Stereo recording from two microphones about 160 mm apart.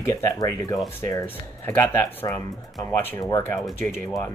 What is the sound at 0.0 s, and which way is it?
Speech, 20° left (ahead or behind).